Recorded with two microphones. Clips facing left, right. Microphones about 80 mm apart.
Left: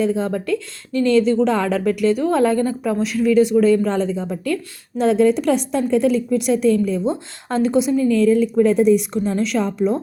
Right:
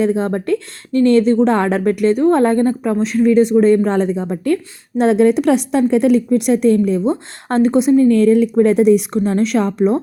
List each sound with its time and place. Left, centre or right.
0.0 s a woman's voice: right